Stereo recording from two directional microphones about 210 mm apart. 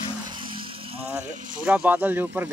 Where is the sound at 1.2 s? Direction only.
35° right (ahead or behind).